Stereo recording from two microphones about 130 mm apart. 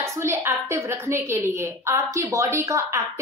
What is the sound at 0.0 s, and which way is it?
A woman's voice, 25° right (ahead or behind).